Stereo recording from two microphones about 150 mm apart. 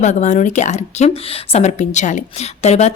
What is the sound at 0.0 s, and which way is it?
A woman's voice, 50° left (ahead or behind).